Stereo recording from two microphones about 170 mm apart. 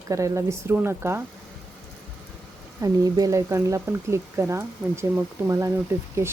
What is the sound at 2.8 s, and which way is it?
Speech, 20° right (ahead or behind).